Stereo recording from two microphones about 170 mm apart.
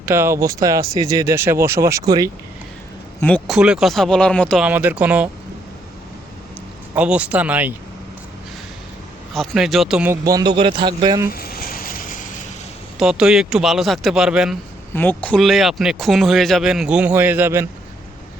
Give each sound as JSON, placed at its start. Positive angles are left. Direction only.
{"t": 0.0, "sound": "speech", "side_deg": -15}
{"t": 3.2, "sound": "speech", "side_deg": 10}
{"t": 3.5, "sound": "speech", "side_deg": -5}
{"t": 4.6, "sound": "speech", "side_deg": -10}
{"t": 6.9, "sound": "speech", "side_deg": -5}
{"t": 9.3, "sound": "speech", "side_deg": 0}
{"t": 10.2, "sound": "a man's voice", "side_deg": -25}
{"t": 11.3, "sound": "a sound", "side_deg": 60}
{"t": 13.0, "sound": "speech", "side_deg": -5}
{"t": 14.9, "sound": "speech", "side_deg": 10}